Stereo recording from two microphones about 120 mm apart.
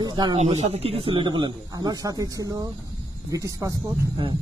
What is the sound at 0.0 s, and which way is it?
Speech, 35° right (ahead or behind).